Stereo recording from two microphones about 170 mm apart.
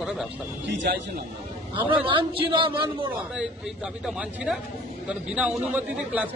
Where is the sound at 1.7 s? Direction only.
30° right (ahead or behind).